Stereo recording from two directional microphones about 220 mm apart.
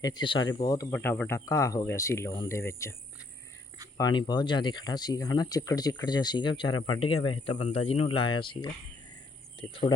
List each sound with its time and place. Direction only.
0.0 s speech: 20° left (ahead or behind)
3.9 s speech: 20° left (ahead or behind)